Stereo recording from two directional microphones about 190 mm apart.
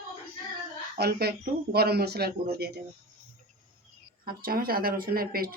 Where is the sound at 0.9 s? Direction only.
55° right (ahead or behind).